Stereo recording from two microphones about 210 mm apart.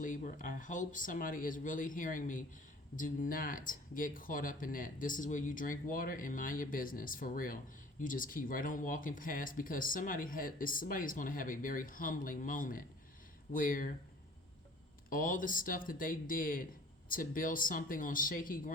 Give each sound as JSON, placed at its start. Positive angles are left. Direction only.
{"t": 0.0, "sound": "speech", "side_deg": 40}
{"t": 15.1, "sound": "speech", "side_deg": 40}